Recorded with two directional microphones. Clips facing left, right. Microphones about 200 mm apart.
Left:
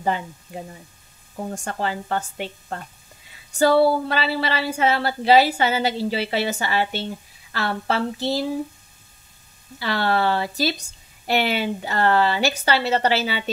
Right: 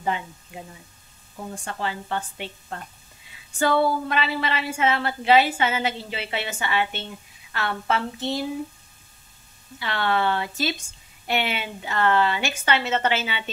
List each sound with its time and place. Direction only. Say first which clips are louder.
0.5 s a woman's voice: left 5 dB; 35° left (ahead or behind)
9.8 s a woman's voice: left 3 dB; 35° left (ahead or behind)